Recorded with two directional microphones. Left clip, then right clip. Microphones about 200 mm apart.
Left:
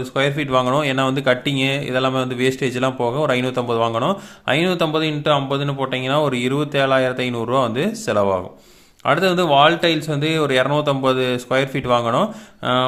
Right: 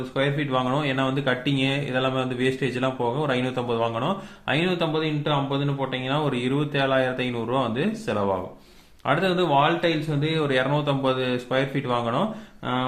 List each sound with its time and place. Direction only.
0.1 s speech: 45° left (ahead or behind)